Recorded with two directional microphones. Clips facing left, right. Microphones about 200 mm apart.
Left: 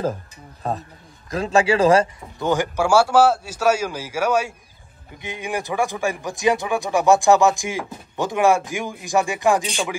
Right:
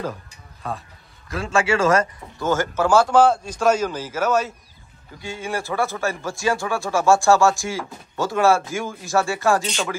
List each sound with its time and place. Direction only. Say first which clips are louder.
0.6 s speech: left 4 dB; 40° left (ahead or behind)
2.3 s speech: left 1 dB; 15° left (ahead or behind)